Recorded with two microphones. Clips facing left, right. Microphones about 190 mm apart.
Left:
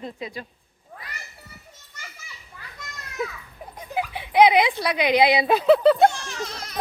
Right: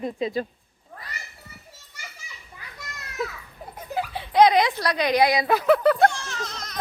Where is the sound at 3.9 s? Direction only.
15° left (ahead or behind).